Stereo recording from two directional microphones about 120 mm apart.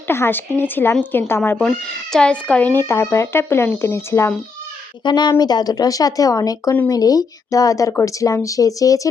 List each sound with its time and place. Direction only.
0.1 s speech: 20° left (ahead or behind)
5.0 s speech: 40° left (ahead or behind)